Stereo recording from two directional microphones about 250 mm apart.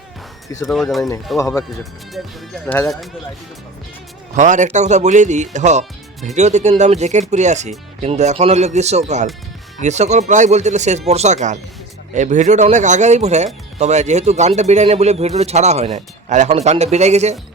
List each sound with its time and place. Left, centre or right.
0.6 s speech: centre
1.4 s speech: centre
1.8 s speech: centre
4.4 s speech: right